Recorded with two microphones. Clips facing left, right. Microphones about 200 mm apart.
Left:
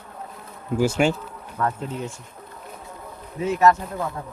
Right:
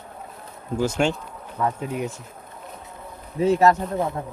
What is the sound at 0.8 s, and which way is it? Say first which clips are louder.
Speech: left 2 dB; 10° left (ahead or behind).